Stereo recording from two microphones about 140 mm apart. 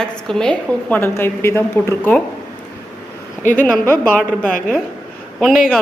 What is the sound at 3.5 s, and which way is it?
Speech, 10° left (ahead or behind).